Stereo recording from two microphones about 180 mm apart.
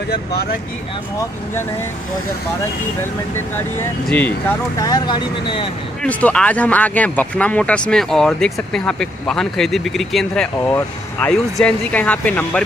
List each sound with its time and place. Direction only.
4.7 s speech: 20° left (ahead or behind)
6.0 s speech: 10° left (ahead or behind)